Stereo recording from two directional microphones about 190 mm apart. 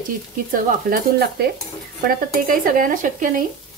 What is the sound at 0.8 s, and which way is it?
Speech, 50° right (ahead or behind).